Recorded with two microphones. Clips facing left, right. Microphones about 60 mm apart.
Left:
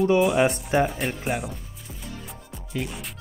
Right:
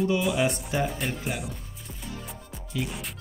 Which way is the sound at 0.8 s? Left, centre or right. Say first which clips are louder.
Left 3 dB; centre.